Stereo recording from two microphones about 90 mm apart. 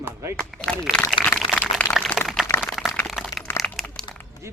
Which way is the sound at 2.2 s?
Centre (ahead or behind).